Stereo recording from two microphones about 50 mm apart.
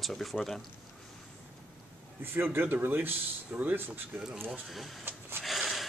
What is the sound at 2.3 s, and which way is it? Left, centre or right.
Speech, right.